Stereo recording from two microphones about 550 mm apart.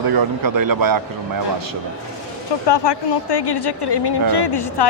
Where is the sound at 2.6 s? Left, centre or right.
Left.